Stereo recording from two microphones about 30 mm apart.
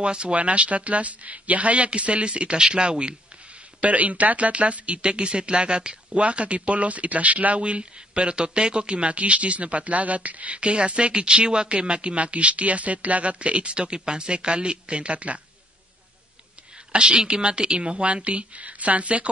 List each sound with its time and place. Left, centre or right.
0.0 s a woman's voice: right
0.4 s speech: right
3.8 s speech: right
5.0 s a woman's voice: right
6.2 s speech: right
16.9 s a woman's voice: right